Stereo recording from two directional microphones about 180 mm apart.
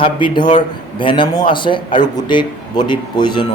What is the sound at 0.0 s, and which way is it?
Speech, 25° left (ahead or behind).